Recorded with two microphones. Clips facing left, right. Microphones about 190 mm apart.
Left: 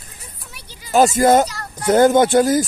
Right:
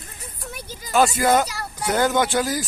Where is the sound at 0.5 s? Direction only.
45° right (ahead or behind).